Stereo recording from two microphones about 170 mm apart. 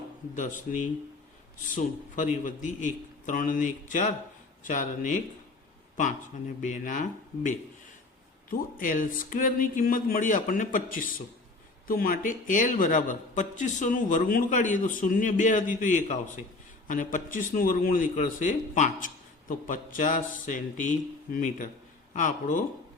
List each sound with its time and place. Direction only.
0.3 s a man's voice: 45° left (ahead or behind)
6.6 s a man's voice: 45° left (ahead or behind)